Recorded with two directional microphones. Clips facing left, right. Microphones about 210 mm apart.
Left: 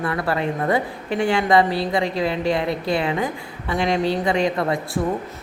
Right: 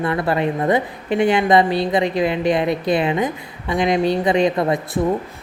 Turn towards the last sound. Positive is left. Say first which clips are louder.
# right 3 dB
turn(degrees=-20)  # may be behind; listen again after turning